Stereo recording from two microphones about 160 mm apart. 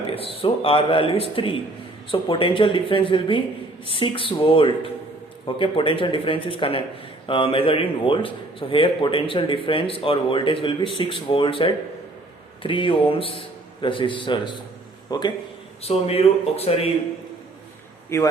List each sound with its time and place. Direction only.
0.1 s a man's voice: 35° left (ahead or behind)
15.8 s a man's voice: 40° left (ahead or behind)
18.1 s a man's voice: 15° left (ahead or behind)